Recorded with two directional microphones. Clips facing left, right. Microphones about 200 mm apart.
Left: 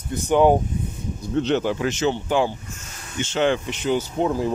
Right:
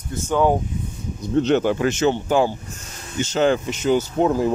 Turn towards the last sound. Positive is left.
turn(degrees=-45)  # may be behind; listen again after turning